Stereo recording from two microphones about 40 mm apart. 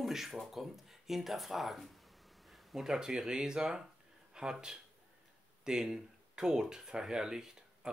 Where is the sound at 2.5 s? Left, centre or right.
Centre.